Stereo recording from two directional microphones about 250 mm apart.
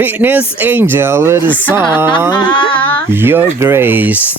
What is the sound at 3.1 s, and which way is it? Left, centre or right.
Speech, centre.